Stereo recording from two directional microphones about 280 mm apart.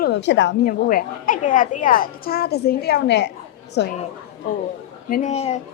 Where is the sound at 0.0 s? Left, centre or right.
Left.